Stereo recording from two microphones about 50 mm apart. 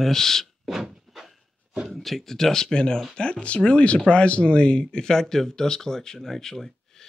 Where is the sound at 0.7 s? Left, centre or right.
Centre.